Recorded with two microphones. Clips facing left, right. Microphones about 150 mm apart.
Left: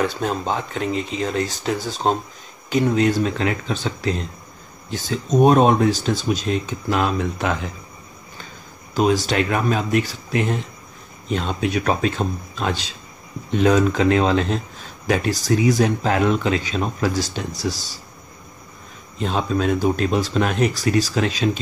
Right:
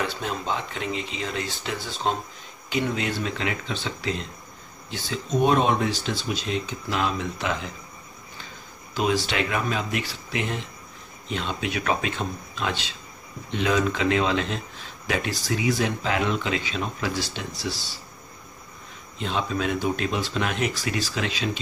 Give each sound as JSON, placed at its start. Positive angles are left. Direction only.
{"t": 0.0, "sound": "speech", "side_deg": 45}
{"t": 8.9, "sound": "speech", "side_deg": 40}
{"t": 19.1, "sound": "speech", "side_deg": 40}